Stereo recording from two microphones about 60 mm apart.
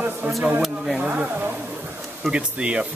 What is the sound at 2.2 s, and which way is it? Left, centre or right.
Speech, centre.